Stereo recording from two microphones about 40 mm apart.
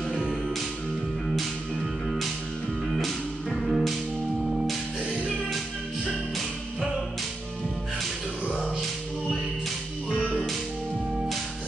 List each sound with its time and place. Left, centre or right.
1.2 s music: centre
2.9 s music: centre
8.5 s music: right